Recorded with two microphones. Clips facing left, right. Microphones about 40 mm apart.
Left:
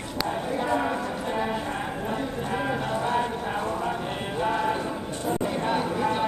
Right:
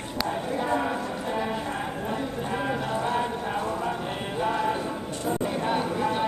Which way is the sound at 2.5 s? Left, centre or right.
Centre.